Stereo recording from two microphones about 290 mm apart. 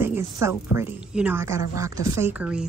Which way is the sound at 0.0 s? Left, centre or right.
Centre.